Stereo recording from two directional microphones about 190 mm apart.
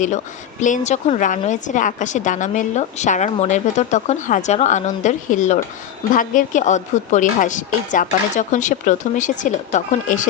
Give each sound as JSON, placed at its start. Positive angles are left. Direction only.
{"t": 0.6, "sound": "a woman's voice", "side_deg": 40}